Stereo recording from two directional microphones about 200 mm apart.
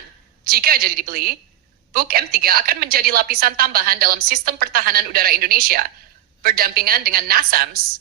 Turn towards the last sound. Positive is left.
turn(degrees=-50)  # may be behind; listen again after turning